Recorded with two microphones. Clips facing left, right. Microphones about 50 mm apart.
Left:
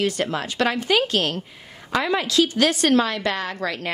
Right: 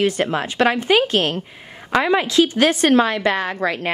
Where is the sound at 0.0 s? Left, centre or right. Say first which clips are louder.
Right 4 dB; right.